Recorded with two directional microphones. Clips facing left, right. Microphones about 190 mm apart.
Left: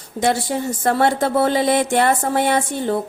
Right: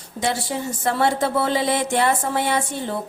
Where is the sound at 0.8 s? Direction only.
50° left (ahead or behind).